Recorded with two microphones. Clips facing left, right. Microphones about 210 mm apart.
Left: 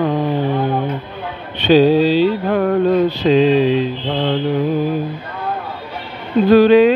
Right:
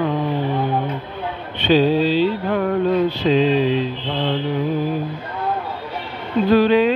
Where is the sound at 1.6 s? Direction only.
80° left.